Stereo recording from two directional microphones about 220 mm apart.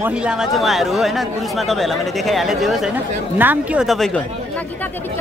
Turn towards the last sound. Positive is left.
turn(degrees=5)  # may be behind; listen again after turning